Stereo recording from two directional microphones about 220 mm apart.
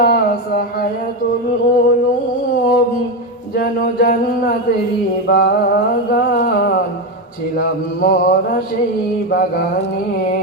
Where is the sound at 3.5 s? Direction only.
45° left (ahead or behind).